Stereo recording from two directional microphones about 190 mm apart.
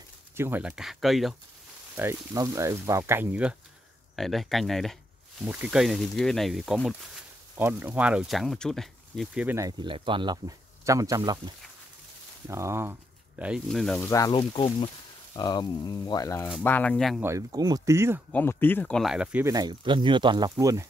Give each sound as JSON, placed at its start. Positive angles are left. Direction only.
{"t": 0.4, "sound": "speech", "side_deg": -10}
{"t": 2.0, "sound": "speech", "side_deg": -15}
{"t": 9.6, "sound": "speech", "side_deg": -20}
{"t": 13.4, "sound": "speech", "side_deg": 0}
{"t": 14.0, "sound": "speech", "side_deg": 20}
{"t": 17.2, "sound": "speech", "side_deg": -15}
{"t": 18.3, "sound": "speech", "side_deg": 10}
{"t": 19.5, "sound": "speech", "side_deg": -20}